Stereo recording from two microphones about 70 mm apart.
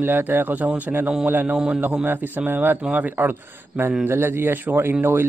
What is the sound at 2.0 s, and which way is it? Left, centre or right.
Speech, right.